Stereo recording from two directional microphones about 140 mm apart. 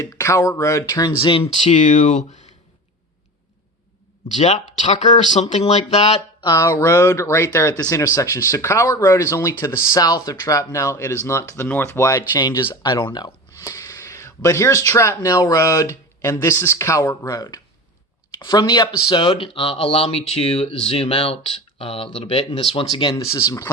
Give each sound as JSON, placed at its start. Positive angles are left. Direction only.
{"t": 0.0, "sound": "speech", "side_deg": 20}
{"t": 1.2, "sound": "speech", "side_deg": 40}
{"t": 1.6, "sound": "speech", "side_deg": 65}
{"t": 4.4, "sound": "speech", "side_deg": 55}
{"t": 6.4, "sound": "speech", "side_deg": 25}
{"t": 13.6, "sound": "speech", "side_deg": 25}
{"t": 23.1, "sound": "speech", "side_deg": 25}